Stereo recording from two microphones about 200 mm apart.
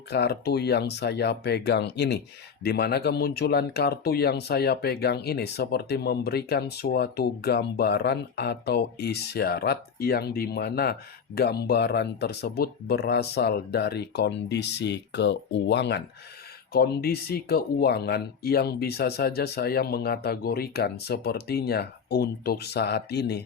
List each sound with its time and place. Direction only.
0.1 s speech: 55° left (ahead or behind)